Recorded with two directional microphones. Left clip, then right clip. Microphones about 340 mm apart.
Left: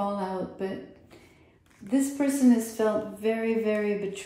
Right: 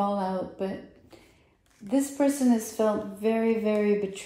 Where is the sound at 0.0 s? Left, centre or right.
Centre.